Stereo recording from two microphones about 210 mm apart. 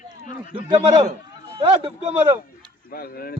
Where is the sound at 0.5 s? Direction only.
25° right (ahead or behind).